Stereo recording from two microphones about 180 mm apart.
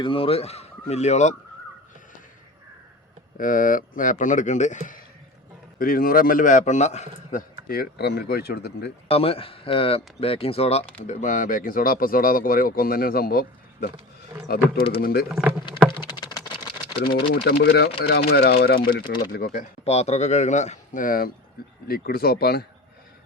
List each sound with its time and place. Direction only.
0.0 s speech: 30° left (ahead or behind)
3.3 s speech: 50° left (ahead or behind)
7.3 s speech: 50° left (ahead or behind)
9.0 s speech: 30° left (ahead or behind); by 13.4 s 55° left (ahead or behind)
15.0 s speech: 55° left (ahead or behind)
15.6 s typing: 25° left (ahead or behind)
17.0 s speech: 60° left (ahead or behind)
19.0 s speech: 25° left (ahead or behind)
19.3 s speech: 55° left (ahead or behind)
19.8 s speech: 35° left (ahead or behind); by 22.6 s 60° left (ahead or behind)